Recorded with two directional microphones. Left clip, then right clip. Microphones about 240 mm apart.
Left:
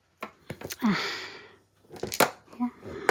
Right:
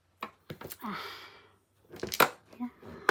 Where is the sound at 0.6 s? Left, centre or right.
Left.